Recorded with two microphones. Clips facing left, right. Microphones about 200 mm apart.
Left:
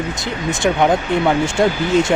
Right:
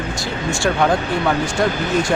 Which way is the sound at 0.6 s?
20° left (ahead or behind).